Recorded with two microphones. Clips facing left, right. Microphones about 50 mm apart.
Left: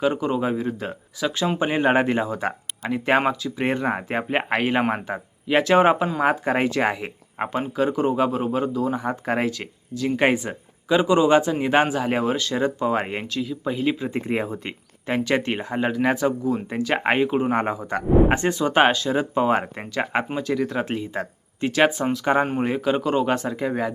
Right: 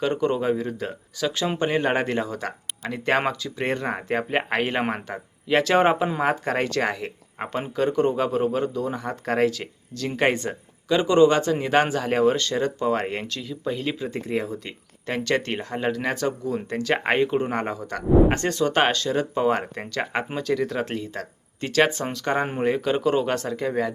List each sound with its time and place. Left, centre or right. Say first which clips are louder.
0.0 s speech: left 1 dB; centre
14.1 s speech: left 2 dB; left
15.0 s speech: left 2 dB; centre